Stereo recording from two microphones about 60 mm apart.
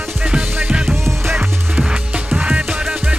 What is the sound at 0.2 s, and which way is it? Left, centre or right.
Music, centre.